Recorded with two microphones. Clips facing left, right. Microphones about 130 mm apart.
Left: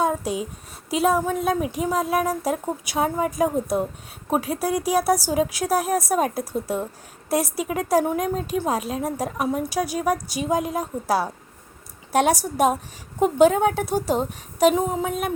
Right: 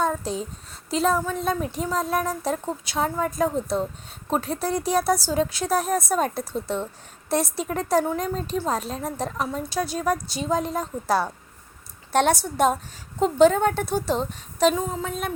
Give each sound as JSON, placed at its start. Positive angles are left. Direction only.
{"t": 0.0, "sound": "a woman's voice", "side_deg": 10}
{"t": 12.1, "sound": "a woman's voice", "side_deg": 10}